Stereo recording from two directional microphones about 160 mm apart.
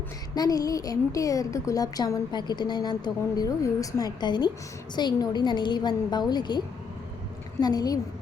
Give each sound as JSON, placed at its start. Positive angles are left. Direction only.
{"t": 0.3, "sound": "speech", "side_deg": 25}
{"t": 7.6, "sound": "speech", "side_deg": 25}